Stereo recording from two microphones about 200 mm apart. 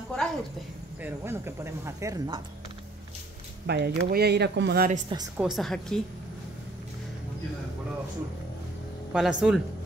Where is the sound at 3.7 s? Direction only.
55° right (ahead or behind).